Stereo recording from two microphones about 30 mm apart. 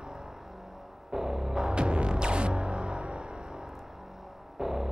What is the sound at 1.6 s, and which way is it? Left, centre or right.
Music, right.